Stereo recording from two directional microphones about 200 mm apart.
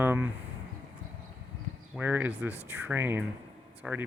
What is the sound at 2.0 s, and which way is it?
Speech, 10° right (ahead or behind).